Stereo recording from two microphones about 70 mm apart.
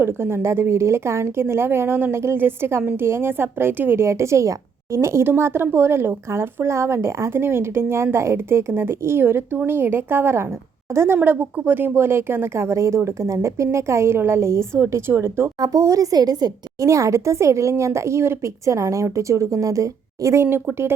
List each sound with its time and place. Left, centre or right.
0.0 s a woman's voice: right
15.6 s a woman's voice: right
16.8 s speech: right